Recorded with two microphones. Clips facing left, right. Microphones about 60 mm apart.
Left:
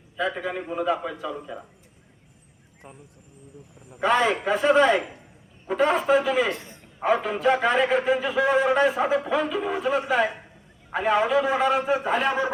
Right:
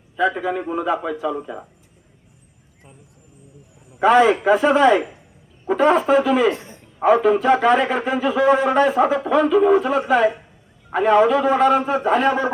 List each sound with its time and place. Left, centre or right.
0.3 s a man's voice: centre
4.0 s a man's voice: centre
6.5 s a man's voice: right
7.0 s a man's voice: centre